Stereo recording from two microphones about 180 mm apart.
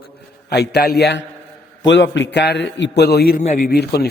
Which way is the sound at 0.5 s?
65° left (ahead or behind).